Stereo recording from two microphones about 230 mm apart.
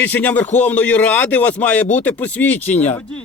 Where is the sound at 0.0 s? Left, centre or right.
Centre.